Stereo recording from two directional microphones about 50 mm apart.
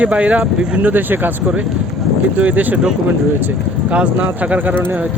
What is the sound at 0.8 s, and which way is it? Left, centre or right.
Speech, right.